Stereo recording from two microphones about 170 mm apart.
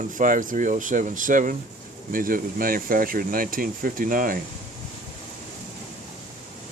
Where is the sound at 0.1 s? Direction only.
50° right (ahead or behind).